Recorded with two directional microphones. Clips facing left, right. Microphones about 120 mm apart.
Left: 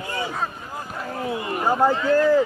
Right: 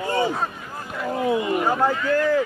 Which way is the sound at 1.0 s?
20° right (ahead or behind).